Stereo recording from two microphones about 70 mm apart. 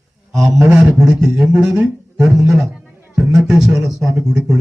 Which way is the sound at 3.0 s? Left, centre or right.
Right.